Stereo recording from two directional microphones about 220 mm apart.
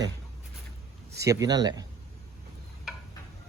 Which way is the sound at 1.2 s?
15° right (ahead or behind).